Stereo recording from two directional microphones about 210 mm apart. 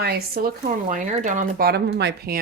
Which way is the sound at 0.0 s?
45° right (ahead or behind).